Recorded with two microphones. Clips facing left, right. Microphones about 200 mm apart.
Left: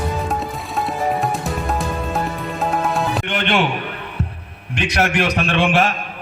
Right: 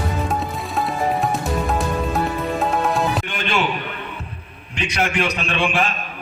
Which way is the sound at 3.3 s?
65° left (ahead or behind).